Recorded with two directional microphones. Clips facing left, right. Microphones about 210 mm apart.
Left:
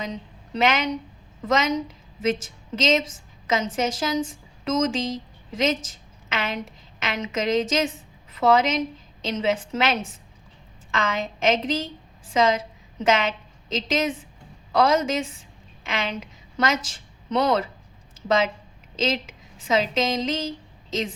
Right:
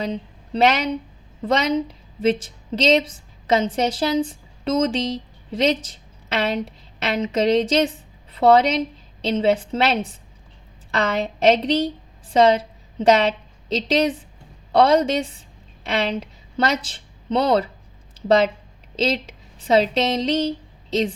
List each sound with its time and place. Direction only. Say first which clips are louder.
0.0 s a woman's voice: right 6 dB; 35° right (ahead or behind)
18.9 s speech: right 3 dB; 35° right (ahead or behind)